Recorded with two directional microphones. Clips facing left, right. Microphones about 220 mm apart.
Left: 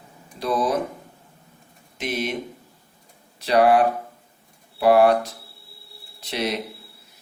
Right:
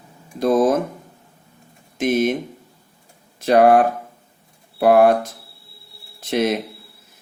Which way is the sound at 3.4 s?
50° right (ahead or behind).